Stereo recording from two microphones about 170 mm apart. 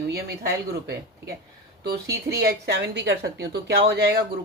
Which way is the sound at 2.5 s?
80° right.